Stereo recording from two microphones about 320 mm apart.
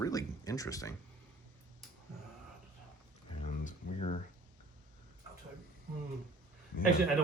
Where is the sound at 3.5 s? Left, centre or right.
Left.